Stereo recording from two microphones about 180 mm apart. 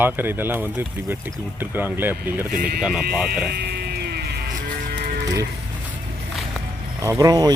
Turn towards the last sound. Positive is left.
turn(degrees=-20)  # may be behind; listen again after turning